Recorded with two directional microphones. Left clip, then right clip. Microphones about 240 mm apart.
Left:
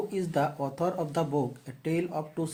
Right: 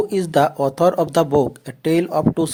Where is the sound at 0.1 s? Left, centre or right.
Right.